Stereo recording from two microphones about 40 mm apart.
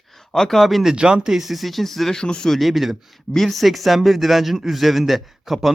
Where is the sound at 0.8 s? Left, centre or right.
Right.